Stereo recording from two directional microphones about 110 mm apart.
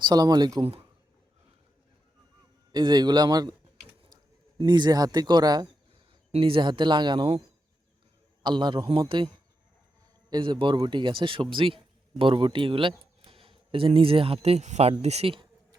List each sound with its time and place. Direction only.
0.0 s a man's voice: 40° right (ahead or behind)
2.7 s a man's voice: 40° right (ahead or behind)
6.3 s speech: 55° right (ahead or behind)
8.4 s speech: 45° right (ahead or behind); by 15.3 s 75° right (ahead or behind)